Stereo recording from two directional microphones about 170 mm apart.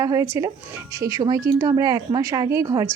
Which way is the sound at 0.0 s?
20° right (ahead or behind).